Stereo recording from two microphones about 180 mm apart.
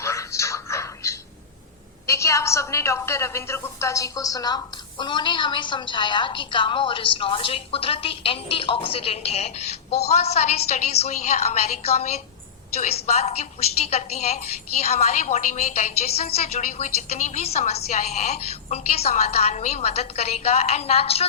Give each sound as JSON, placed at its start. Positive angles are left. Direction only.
{"t": 0.0, "sound": "television", "side_deg": 15}
{"t": 2.0, "sound": "a woman's voice", "side_deg": 15}